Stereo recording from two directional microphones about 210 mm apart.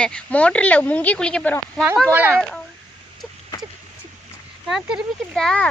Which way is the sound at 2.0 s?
10° right (ahead or behind).